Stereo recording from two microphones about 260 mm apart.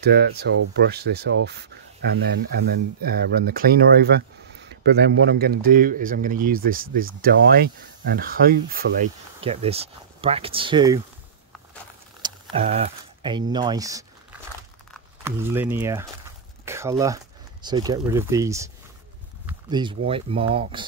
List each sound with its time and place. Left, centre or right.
0.0 s speech: right
3.0 s speech: right
9.4 s speech: right
12.2 s speech: right
15.2 s speech: centre
19.4 s a sound: centre
20.1 s speech: right